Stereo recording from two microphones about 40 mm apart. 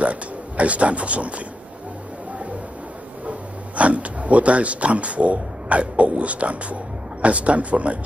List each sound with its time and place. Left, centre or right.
0.0 s speech: right
3.3 s speech: right